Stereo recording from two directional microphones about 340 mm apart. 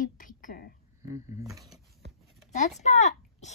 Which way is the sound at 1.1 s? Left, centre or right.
Centre.